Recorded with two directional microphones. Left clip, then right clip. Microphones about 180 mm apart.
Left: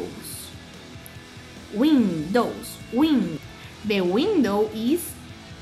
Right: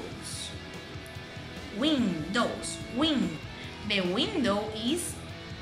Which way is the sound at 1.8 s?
60° left (ahead or behind).